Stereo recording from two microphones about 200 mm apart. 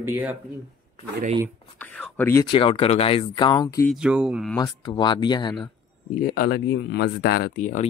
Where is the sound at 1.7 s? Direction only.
5° left (ahead or behind).